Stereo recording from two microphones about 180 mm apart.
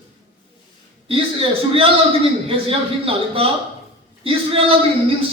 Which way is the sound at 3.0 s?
30° right (ahead or behind).